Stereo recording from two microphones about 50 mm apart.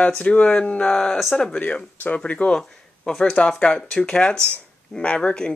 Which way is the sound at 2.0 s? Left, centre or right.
Left.